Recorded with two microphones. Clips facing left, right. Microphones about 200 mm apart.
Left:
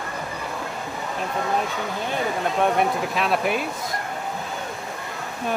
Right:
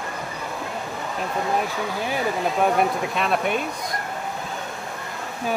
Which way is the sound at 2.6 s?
Centre (ahead or behind).